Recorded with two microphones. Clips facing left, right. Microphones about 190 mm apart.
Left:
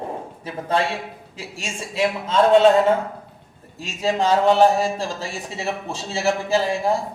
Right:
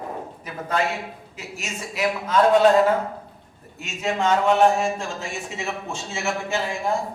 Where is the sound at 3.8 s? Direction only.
35° left (ahead or behind).